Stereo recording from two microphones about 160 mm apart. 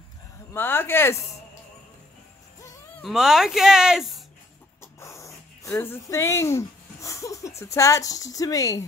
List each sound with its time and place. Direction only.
0.5 s speech: 15° left (ahead or behind)
3.0 s speech: centre (ahead or behind)
5.0 s a sound: 20° left (ahead or behind)
7.6 s speech: 20° left (ahead or behind)